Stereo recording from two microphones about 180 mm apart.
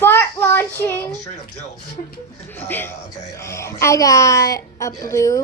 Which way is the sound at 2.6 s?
10° left (ahead or behind).